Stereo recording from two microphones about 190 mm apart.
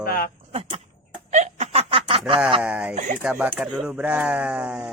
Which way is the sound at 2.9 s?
40° right (ahead or behind).